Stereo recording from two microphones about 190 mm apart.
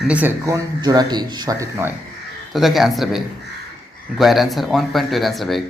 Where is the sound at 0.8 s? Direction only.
20° right (ahead or behind).